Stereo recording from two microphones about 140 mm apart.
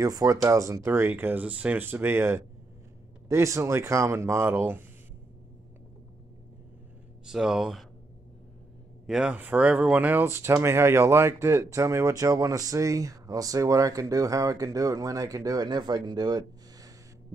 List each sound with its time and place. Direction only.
0.0 s speech: 25° right (ahead or behind)
7.2 s speech: 5° right (ahead or behind)
9.0 s speech: 5° right (ahead or behind); by 16.9 s 30° right (ahead or behind)